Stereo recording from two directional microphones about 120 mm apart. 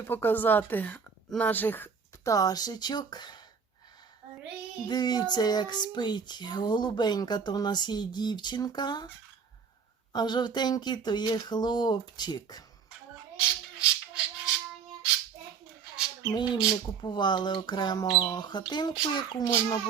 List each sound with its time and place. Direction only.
0.1 s a woman's voice: 15° left (ahead or behind)
2.3 s child singing: 30° left (ahead or behind)
4.9 s child singing: 35° left (ahead or behind)
10.1 s child singing: 35° left (ahead or behind)
13.7 s music: 5° right (ahead or behind)
16.3 s child singing: 35° left (ahead or behind)